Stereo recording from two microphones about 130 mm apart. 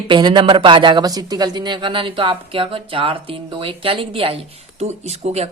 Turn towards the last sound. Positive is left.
turn(degrees=-55)  # may be behind; listen again after turning